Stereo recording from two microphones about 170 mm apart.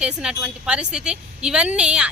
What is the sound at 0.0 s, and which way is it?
A woman's voice, 5° right (ahead or behind).